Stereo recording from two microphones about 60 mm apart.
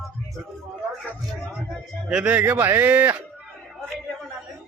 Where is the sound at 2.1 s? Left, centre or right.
Right.